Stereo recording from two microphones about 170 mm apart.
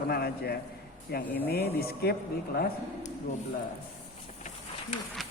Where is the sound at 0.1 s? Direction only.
65° left (ahead or behind).